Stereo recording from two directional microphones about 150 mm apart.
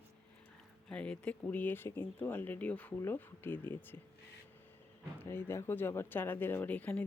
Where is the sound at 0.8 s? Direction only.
5° left (ahead or behind).